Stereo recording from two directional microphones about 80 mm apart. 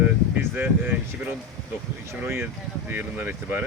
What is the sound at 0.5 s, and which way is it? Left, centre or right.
Speech, right.